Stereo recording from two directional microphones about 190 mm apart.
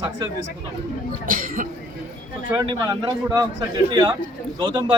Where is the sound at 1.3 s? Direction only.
45° right (ahead or behind).